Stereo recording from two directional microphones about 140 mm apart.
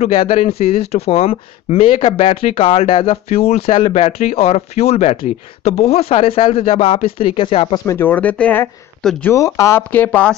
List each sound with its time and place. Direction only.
0.0 s speech: 45° left (ahead or behind)
7.7 s speech: 20° left (ahead or behind)